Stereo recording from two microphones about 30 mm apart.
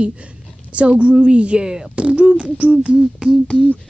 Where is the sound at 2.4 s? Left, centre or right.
Right.